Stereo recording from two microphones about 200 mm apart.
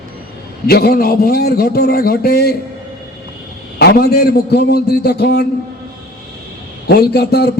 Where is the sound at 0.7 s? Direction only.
50° left (ahead or behind).